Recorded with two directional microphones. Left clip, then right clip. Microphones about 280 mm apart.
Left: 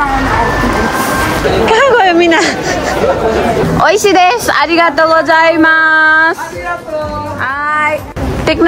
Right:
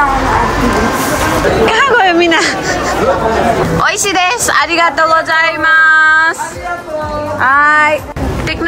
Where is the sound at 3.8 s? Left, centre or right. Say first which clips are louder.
Left 4 dB; centre.